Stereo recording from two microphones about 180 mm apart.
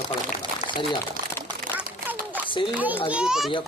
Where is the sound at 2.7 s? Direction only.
10° right (ahead or behind).